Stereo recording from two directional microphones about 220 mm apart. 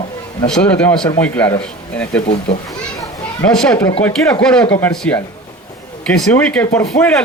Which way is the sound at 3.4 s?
5° left (ahead or behind).